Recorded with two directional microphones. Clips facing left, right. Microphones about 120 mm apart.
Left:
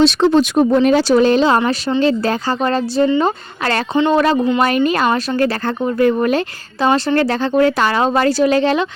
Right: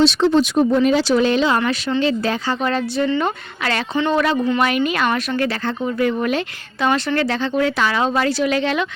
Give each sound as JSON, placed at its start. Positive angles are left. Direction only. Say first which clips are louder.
{"t": 0.0, "sound": "speech", "louder": "left 3 dB", "side_deg": 50}
{"t": 4.4, "sound": "speech", "louder": "left 3 dB", "side_deg": 20}
{"t": 4.6, "sound": "speech", "louder": "left 4 dB", "side_deg": 40}